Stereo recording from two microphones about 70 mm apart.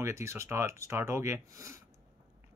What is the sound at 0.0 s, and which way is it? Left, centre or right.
Speech, right.